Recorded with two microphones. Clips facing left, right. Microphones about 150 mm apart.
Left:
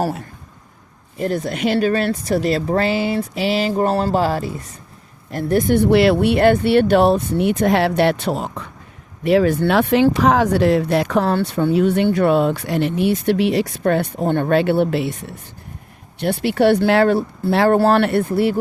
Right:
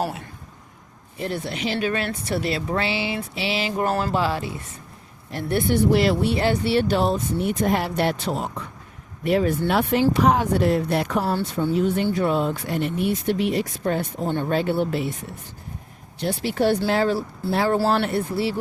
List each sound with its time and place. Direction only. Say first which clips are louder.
1.2 s speech: left 7 dB; 45° left (ahead or behind)
1.9 s speech: left 7 dB; 35° left (ahead or behind)
5.7 s speech: left 5 dB; 65° left (ahead or behind)
16.2 s speech: left 6 dB; 65° left (ahead or behind)